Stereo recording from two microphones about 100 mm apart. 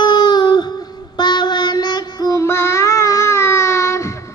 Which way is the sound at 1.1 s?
50° left (ahead or behind).